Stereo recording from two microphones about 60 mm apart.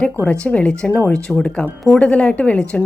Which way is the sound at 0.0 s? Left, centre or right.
Centre.